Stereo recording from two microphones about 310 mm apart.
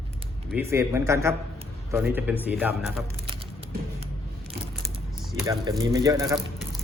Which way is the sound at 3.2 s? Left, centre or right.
Centre.